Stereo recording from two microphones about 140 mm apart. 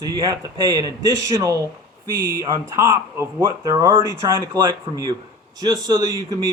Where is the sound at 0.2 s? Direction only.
20° right (ahead or behind).